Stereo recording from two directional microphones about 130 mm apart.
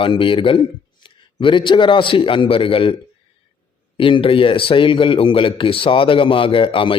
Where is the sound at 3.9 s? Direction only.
40° left (ahead or behind).